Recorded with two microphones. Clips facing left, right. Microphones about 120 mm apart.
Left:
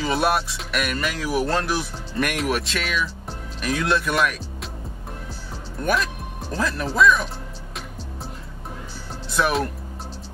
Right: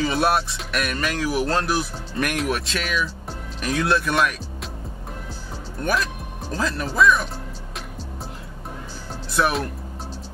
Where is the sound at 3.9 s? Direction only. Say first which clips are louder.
Right 1 dB; centre (ahead or behind).